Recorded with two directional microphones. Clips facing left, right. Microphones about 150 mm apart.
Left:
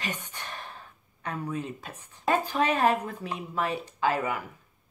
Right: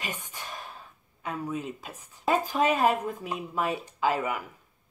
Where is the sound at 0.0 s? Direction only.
10° right (ahead or behind).